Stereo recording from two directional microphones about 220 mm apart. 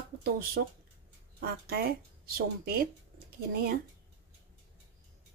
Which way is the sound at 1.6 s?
45° right (ahead or behind).